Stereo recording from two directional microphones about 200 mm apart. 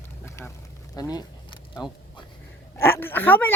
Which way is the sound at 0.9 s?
20° left (ahead or behind).